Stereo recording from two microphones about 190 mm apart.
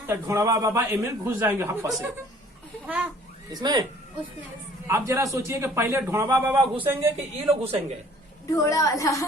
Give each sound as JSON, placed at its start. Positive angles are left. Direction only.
{"t": 0.1, "sound": "a man's voice", "side_deg": -15}
{"t": 3.5, "sound": "speech", "side_deg": -20}
{"t": 4.9, "sound": "a man's voice", "side_deg": -15}
{"t": 7.4, "sound": "a man's voice", "side_deg": -30}
{"t": 8.5, "sound": "a woman's voice", "side_deg": 15}